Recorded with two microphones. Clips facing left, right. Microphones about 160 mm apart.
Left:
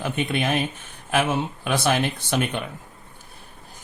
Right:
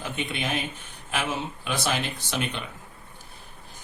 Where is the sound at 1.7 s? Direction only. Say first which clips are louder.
Left 6 dB; 55° left (ahead or behind).